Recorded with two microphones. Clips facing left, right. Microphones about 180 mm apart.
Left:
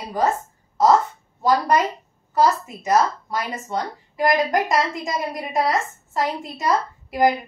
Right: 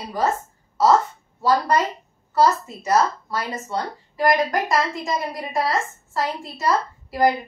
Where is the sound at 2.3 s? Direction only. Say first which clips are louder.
Even; 15° left (ahead or behind).